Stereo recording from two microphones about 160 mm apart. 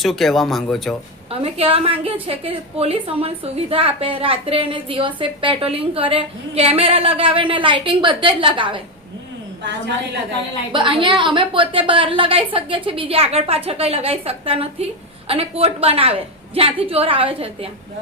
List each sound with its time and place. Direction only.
0.0 s speech: centre (ahead or behind)
1.3 s a woman's voice: 35° right (ahead or behind)
10.7 s a woman's voice: 30° right (ahead or behind)